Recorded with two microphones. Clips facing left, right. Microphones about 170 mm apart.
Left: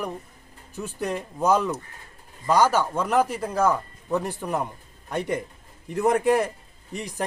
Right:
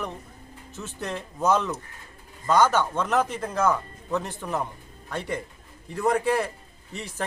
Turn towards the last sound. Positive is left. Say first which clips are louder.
# left 3 dB
turn(degrees=15)  # may be behind; listen again after turning